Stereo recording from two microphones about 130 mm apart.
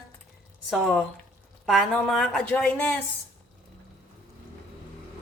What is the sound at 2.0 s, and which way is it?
Speech, centre (ahead or behind).